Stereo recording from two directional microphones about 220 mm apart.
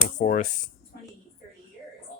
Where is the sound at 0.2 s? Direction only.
35° left (ahead or behind).